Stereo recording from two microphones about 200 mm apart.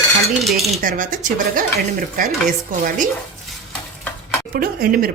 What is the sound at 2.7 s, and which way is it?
Speech, 40° right (ahead or behind).